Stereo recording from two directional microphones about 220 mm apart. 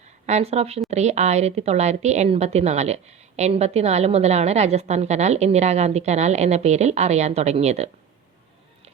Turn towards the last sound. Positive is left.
turn(degrees=-30)  # may be behind; listen again after turning